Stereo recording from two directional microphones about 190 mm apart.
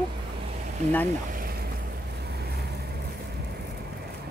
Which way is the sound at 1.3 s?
50° right (ahead or behind).